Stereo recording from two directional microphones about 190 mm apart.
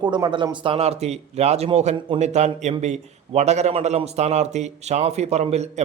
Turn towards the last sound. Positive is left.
turn(degrees=-35)  # may be behind; listen again after turning